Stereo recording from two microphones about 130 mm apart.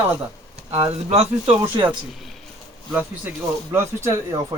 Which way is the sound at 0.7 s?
50° right (ahead or behind).